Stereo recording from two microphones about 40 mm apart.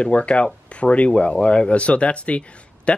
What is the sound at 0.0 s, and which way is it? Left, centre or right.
Speech, left.